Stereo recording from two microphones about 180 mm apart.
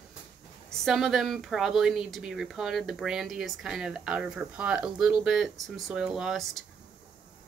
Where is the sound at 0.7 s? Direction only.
Centre (ahead or behind).